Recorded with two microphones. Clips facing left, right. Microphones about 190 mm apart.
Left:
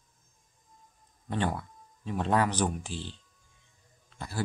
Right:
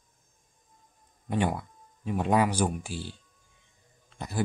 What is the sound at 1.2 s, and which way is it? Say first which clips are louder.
Speech: right 3 dB; 15° right (ahead or behind).